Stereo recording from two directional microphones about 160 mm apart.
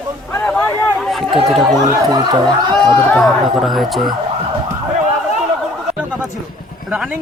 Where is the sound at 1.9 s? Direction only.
25° right (ahead or behind).